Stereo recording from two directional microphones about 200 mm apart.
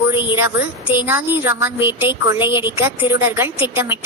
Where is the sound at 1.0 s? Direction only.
10° right (ahead or behind).